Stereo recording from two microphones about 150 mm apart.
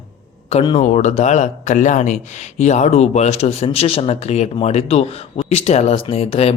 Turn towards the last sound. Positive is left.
turn(degrees=40)  # may be behind; listen again after turning